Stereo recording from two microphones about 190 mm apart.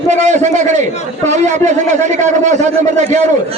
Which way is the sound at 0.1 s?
40° right (ahead or behind).